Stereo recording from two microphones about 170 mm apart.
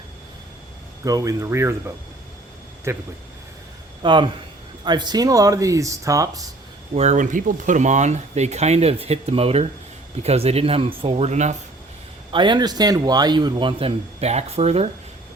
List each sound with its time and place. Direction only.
1.0 s speech: 20° right (ahead or behind)
2.9 s speech: 15° right (ahead or behind)
4.0 s a man's voice: 25° right (ahead or behind)
6.9 s speech: 40° right (ahead or behind)
12.3 s a man's voice: 25° right (ahead or behind)